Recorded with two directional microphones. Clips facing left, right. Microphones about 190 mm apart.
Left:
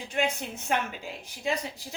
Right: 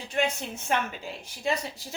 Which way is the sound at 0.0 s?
15° left (ahead or behind).